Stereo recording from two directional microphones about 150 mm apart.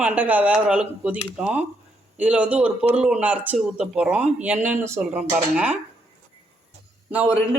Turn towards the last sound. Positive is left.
turn(degrees=-10)  # may be behind; listen again after turning